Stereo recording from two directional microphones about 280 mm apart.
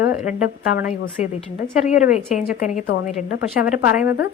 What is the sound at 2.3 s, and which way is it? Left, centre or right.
Speech, left.